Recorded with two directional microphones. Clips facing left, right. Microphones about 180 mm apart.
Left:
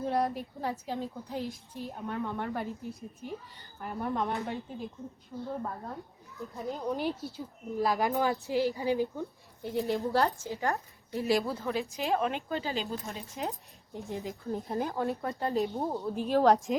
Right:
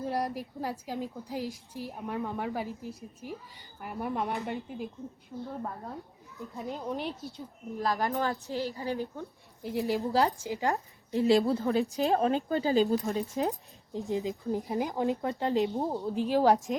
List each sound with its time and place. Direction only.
0.0 s speech: 5° right (ahead or behind); by 9.0 s 15° left (ahead or behind)
9.6 s speech: centre (ahead or behind)
10.4 s a woman's voice: 15° right (ahead or behind); by 13.5 s 35° right (ahead or behind)
13.9 s speech: 15° right (ahead or behind)